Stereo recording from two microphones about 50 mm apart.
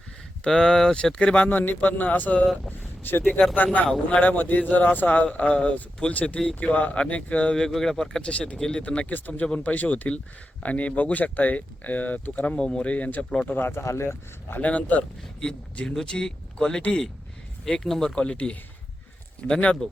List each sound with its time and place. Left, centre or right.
0.4 s speech: centre
0.9 s speech: centre
1.5 s a man's voice: left
2.6 s a sound: left
3.5 s a man's voice: left
7.5 s speech: centre
8.2 s a man's voice: left
12.5 s speech: centre
13.5 s speech: left
13.8 s speech: left
14.6 s a man's voice: left